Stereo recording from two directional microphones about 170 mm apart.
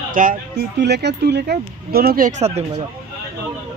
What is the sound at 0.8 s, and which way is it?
Speech, 80° right.